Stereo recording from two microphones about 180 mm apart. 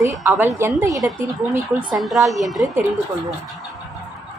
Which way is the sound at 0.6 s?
15° right (ahead or behind).